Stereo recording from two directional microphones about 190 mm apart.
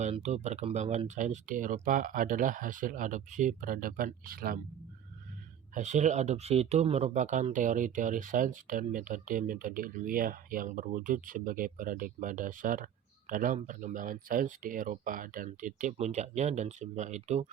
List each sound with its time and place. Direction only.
0.0 s speech: 35° right (ahead or behind)
5.7 s speech: 40° right (ahead or behind)